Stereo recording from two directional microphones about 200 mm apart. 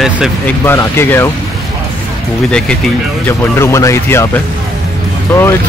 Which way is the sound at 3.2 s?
15° left (ahead or behind).